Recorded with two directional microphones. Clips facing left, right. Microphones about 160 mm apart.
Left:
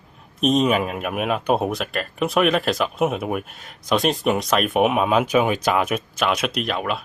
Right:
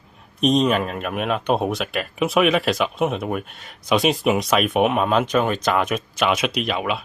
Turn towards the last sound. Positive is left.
turn(degrees=0)  # may be behind; listen again after turning